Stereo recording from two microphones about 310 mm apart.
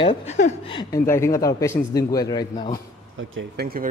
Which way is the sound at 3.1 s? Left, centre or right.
Right.